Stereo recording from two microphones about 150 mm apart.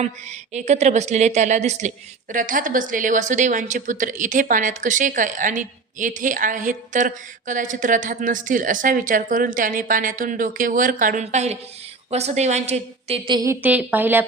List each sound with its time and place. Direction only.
0.0 s a woman's voice: 50° right (ahead or behind)
2.3 s a woman's voice: 65° right (ahead or behind); by 13.4 s 35° right (ahead or behind)
13.4 s a woman's voice: 15° right (ahead or behind)